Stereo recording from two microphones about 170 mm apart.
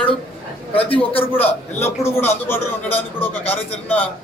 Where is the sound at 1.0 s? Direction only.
35° left (ahead or behind).